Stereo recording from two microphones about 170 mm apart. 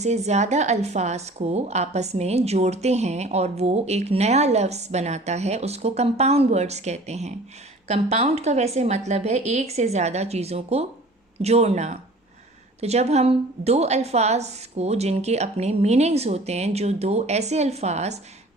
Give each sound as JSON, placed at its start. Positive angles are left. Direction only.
{"t": 0.0, "sound": "speech", "side_deg": -40}